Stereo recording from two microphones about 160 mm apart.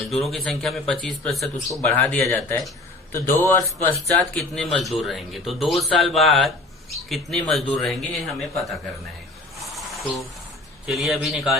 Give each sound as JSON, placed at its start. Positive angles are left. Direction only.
{"t": 0.0, "sound": "speech", "side_deg": 0}
{"t": 4.4, "sound": "speech", "side_deg": 0}
{"t": 9.6, "sound": "a sound", "side_deg": 0}
{"t": 10.8, "sound": "speech", "side_deg": 0}